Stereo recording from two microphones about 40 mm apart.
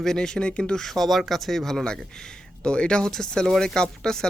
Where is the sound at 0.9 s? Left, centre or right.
Centre.